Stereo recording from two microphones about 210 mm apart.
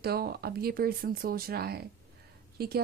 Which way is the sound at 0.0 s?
45° right (ahead or behind).